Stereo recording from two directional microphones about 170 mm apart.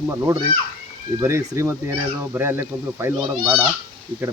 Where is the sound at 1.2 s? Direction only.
15° right (ahead or behind).